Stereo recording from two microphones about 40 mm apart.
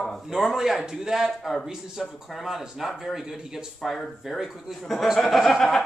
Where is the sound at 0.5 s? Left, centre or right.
Centre.